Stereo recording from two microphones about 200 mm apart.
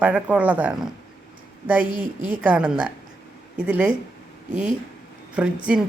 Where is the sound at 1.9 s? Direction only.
40° right (ahead or behind).